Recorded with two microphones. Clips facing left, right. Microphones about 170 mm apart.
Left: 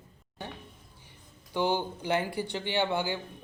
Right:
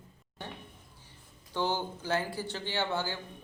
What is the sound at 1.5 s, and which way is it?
Speech, 15° left (ahead or behind).